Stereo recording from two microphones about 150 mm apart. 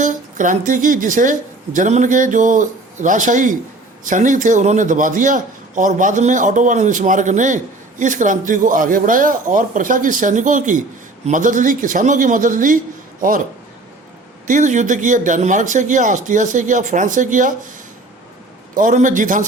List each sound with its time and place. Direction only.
0.0 s a man's voice: 60° right (ahead or behind)
14.4 s a man's voice: 55° right (ahead or behind)
18.7 s a man's voice: 60° right (ahead or behind)